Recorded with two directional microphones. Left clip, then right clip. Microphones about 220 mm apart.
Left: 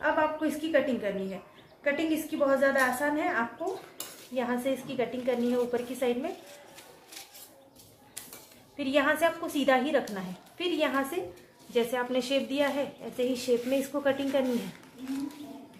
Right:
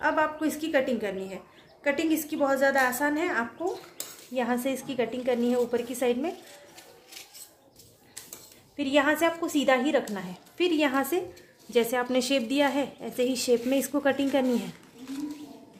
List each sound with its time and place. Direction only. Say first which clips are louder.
0.0 s a woman's voice: right 1 dB; 55° right (ahead or behind)
8.7 s a woman's voice: right 2 dB; 40° right (ahead or behind)